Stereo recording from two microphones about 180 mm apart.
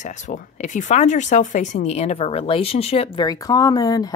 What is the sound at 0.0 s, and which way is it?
Speech, 45° left (ahead or behind).